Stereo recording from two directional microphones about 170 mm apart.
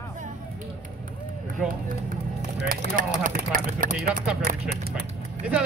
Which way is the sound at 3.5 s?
55° right (ahead or behind).